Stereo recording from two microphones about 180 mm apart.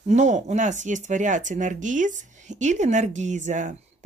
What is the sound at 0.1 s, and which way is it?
Speech, 40° right (ahead or behind).